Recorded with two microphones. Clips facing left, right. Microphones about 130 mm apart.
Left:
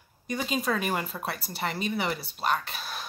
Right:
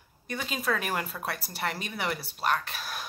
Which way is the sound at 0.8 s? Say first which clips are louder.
Left 2 dB; centre (ahead or behind).